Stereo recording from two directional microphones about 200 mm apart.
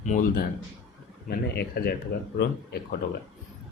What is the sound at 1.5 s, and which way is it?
Speech, 50° left (ahead or behind).